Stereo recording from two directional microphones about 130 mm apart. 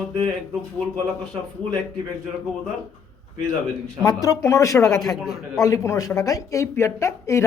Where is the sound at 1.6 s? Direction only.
45° right (ahead or behind).